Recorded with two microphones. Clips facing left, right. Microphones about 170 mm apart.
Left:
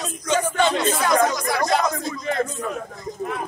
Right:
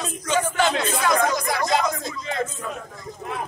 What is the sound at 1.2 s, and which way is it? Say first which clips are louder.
Speech: left 2 dB; 45° left (ahead or behind).